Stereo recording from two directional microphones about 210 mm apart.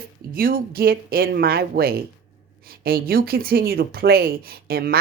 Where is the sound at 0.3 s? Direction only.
45° right (ahead or behind).